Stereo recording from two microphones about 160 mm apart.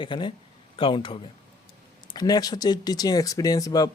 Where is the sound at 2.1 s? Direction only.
25° left (ahead or behind).